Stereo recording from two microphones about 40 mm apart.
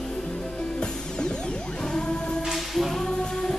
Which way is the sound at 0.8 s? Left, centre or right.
Left.